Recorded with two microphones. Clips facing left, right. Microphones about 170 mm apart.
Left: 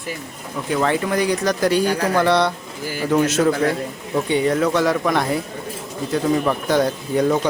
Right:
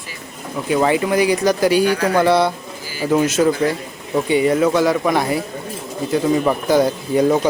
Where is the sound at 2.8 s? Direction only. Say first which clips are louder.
Left 1 dB; 55° left (ahead or behind).